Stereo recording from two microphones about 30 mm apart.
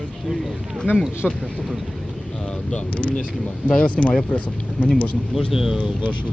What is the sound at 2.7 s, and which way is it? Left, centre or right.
Speech, left.